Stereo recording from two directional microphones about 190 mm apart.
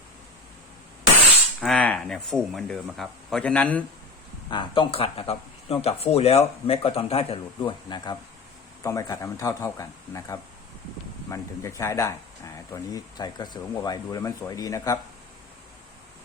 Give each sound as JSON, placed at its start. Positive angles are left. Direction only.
{"t": 1.6, "sound": "speech", "side_deg": 5}
{"t": 4.4, "sound": "speech", "side_deg": 25}